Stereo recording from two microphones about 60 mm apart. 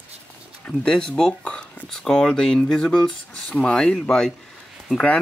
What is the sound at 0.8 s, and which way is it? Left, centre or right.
Speech, centre.